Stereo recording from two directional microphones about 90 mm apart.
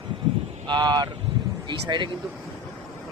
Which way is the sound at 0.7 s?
55° right (ahead or behind).